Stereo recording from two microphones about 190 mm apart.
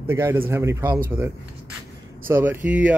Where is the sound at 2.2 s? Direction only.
10° right (ahead or behind).